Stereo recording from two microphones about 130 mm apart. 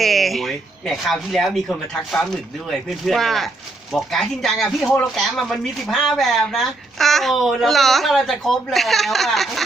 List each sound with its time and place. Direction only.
0.0 s speech: centre (ahead or behind)